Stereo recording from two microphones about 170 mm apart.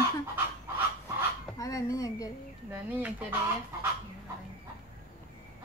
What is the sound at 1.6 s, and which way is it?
Speech, 20° left (ahead or behind).